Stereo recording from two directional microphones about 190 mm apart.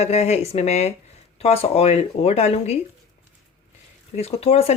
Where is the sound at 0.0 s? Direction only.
35° left (ahead or behind).